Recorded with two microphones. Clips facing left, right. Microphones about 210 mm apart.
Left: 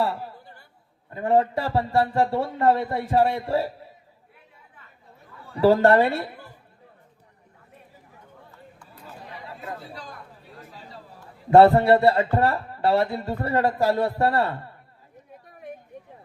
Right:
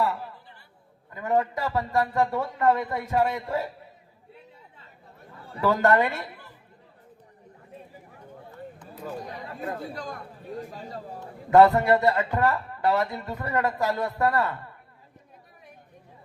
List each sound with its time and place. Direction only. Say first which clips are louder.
1.1 s speech: left 4 dB; 30° left (ahead or behind)
5.5 s speech: left 5 dB; 30° left (ahead or behind)
9.2 s chatter: right 4 dB; 45° right (ahead or behind)
10.7 s speech: right 6 dB; 45° right (ahead or behind)
11.5 s speech: left 3 dB; 30° left (ahead or behind)